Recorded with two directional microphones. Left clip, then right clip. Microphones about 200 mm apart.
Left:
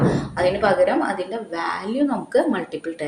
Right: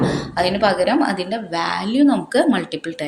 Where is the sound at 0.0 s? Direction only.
40° right (ahead or behind).